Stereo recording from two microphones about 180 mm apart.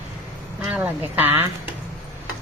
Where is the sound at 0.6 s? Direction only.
10° right (ahead or behind).